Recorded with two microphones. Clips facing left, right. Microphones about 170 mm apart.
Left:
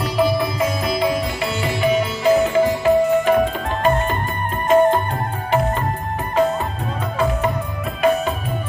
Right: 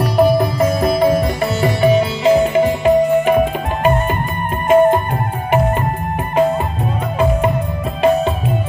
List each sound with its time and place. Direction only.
0.0 s music: 50° right (ahead or behind)
1.9 s music: 30° right (ahead or behind)